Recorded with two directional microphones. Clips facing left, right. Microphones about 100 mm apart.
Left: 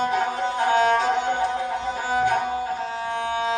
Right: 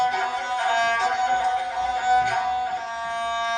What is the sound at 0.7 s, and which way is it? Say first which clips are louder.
Music: left 6 dB; 35° left (ahead or behind).